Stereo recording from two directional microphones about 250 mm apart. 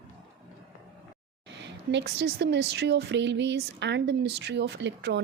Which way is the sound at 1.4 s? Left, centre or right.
Right.